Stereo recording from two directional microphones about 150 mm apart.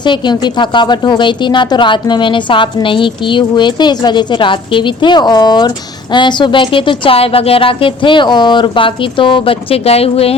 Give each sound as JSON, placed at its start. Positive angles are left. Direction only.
{"t": 0.0, "sound": "speech", "side_deg": 30}